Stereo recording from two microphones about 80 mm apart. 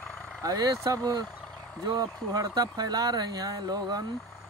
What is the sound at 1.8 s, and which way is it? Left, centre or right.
Speech, right.